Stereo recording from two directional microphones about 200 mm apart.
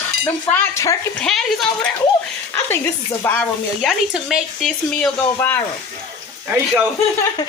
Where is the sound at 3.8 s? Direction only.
Centre (ahead or behind).